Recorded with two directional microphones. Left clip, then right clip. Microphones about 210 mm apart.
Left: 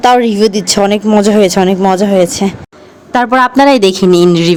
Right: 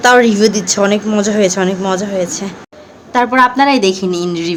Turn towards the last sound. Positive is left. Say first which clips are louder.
# left 10 dB
turn(degrees=40)  # may be behind; listen again after turning